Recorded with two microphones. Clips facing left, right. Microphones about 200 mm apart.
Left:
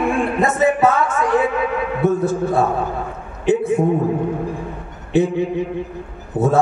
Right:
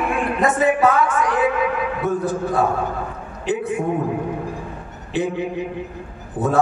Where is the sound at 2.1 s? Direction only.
25° left (ahead or behind).